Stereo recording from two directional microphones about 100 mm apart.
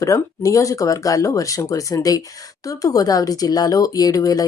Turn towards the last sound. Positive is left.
turn(degrees=35)  # may be behind; listen again after turning